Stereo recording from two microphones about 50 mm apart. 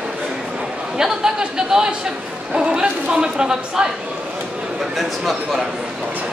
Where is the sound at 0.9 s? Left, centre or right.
Centre.